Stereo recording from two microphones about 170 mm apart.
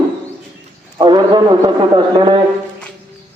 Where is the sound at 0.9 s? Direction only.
25° right (ahead or behind).